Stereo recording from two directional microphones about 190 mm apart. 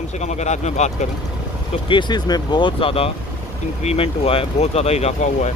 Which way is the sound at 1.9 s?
25° left (ahead or behind).